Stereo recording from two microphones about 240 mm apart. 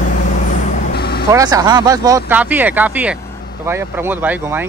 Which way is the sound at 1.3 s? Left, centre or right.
Centre.